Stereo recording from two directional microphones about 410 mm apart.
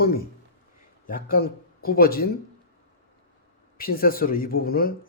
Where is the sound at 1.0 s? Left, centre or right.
Left.